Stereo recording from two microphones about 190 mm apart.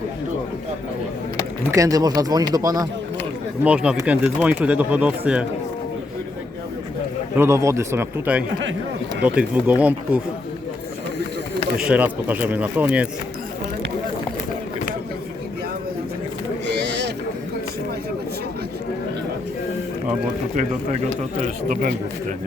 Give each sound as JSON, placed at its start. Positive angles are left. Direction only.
{"t": 1.7, "sound": "speech", "side_deg": -20}
{"t": 3.6, "sound": "speech", "side_deg": -5}
{"t": 7.3, "sound": "speech", "side_deg": -15}
{"t": 11.9, "sound": "speech", "side_deg": -10}
{"t": 16.6, "sound": "boat", "side_deg": -65}
{"t": 21.3, "sound": "speech", "side_deg": -40}